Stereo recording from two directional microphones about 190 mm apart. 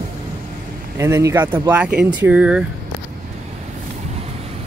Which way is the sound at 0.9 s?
15° right (ahead or behind).